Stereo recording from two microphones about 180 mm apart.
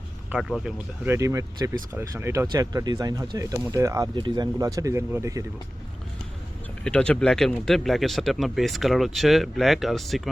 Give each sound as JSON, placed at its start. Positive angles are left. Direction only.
{"t": 0.3, "sound": "speech", "side_deg": -5}
{"t": 1.1, "sound": "speech", "side_deg": -15}
{"t": 6.8, "sound": "speech", "side_deg": 5}